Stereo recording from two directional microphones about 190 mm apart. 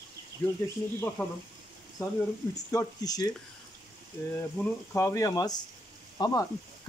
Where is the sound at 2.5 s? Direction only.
20° left (ahead or behind).